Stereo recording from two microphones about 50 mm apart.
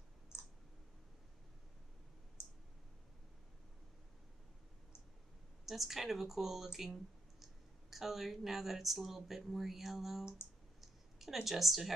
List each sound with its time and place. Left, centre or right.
0.3 s clicking: left
5.7 s speech: centre
10.8 s a sound: centre
11.4 s speech: centre